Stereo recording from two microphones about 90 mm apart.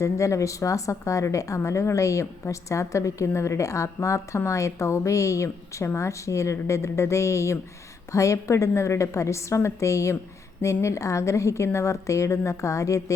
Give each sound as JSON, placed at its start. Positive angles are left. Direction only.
{"t": 0.0, "sound": "a woman's voice", "side_deg": 35}